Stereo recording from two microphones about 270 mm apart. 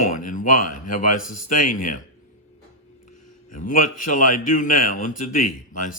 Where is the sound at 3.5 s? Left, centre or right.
Left.